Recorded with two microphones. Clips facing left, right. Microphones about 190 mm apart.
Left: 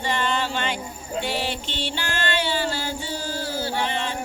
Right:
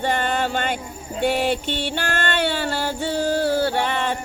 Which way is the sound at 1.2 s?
50° right (ahead or behind).